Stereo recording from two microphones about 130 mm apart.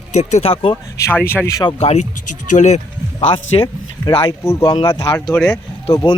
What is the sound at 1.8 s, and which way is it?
Speech, 55° left (ahead or behind).